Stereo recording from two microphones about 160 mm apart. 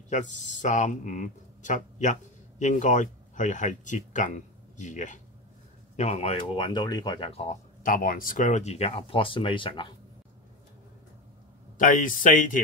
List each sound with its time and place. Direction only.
0.1 s speech: 50° left (ahead or behind)
7.8 s speech: 60° left (ahead or behind); by 9.9 s 30° left (ahead or behind)
11.8 s speech: 55° left (ahead or behind)